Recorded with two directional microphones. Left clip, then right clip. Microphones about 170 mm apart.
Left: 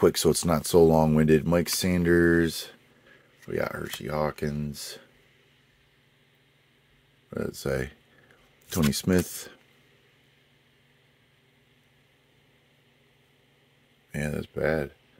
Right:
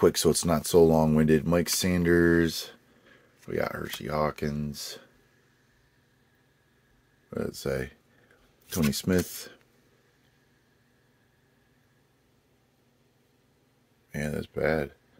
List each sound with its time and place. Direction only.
0.0 s speech: 15° left (ahead or behind)
7.2 s speech: 10° left (ahead or behind)
14.1 s speech: 15° left (ahead or behind)